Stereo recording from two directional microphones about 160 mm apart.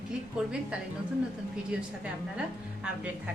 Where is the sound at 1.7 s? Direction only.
5° right (ahead or behind).